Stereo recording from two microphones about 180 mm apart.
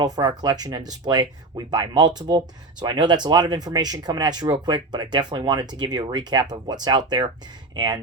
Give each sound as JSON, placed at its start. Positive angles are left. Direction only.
{"t": 0.0, "sound": "speech", "side_deg": -25}